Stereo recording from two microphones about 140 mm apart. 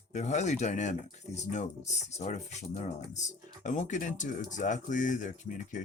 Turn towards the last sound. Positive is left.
turn(degrees=65)  # may be behind; listen again after turning